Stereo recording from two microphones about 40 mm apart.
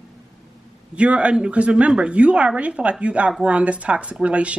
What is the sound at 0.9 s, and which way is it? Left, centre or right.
A woman's voice, right.